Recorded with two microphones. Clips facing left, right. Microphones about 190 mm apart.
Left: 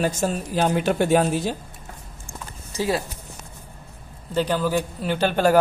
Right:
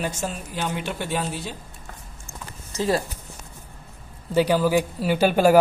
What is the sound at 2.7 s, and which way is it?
Speech, 15° left (ahead or behind).